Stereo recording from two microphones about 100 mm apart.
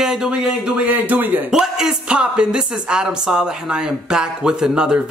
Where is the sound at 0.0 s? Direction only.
5° right (ahead or behind).